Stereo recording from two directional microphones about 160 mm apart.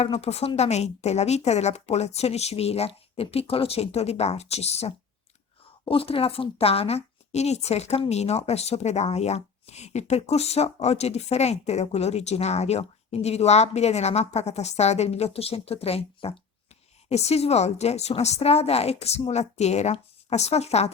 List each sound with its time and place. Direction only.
0.0 s a woman's voice: 40° left (ahead or behind)